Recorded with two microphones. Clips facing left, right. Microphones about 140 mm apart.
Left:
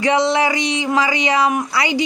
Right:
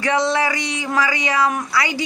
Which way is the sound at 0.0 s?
20° left (ahead or behind).